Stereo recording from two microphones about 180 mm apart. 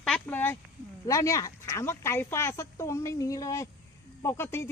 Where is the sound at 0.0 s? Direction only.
5° left (ahead or behind).